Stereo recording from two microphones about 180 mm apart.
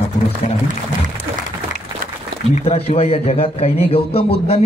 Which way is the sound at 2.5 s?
35° left (ahead or behind).